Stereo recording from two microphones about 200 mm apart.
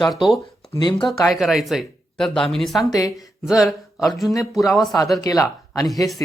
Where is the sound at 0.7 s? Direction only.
20° left (ahead or behind).